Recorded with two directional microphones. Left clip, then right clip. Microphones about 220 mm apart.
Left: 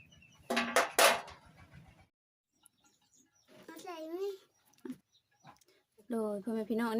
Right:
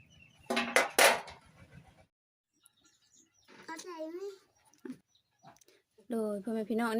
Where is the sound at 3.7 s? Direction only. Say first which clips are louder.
Right 2 dB; 20° left (ahead or behind).